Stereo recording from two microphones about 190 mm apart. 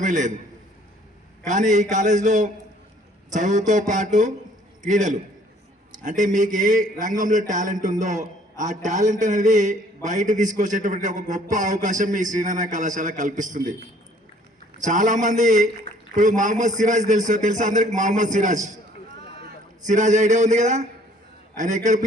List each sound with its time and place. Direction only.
0.0 s a man's voice: 40° right (ahead or behind)
1.5 s a man's voice: 40° right (ahead or behind)
14.8 s a man's voice: 40° right (ahead or behind)
19.8 s a man's voice: 40° right (ahead or behind)